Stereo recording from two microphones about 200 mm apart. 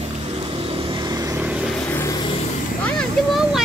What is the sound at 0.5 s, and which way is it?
Vehicle, 30° right (ahead or behind).